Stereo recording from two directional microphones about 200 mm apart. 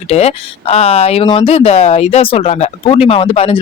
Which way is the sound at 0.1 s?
30° left (ahead or behind).